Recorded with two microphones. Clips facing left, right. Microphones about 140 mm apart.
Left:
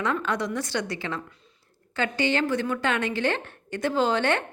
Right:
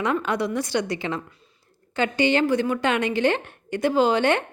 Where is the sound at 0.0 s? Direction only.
15° right (ahead or behind).